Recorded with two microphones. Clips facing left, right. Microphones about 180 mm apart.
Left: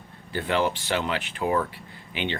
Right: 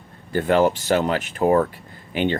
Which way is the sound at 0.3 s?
45° right (ahead or behind).